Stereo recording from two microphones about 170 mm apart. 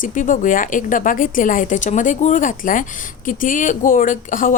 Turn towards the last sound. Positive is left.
turn(degrees=50)  # may be behind; listen again after turning